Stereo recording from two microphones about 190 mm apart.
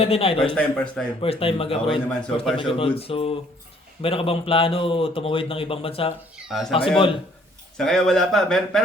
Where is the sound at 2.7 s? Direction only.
30° left (ahead or behind).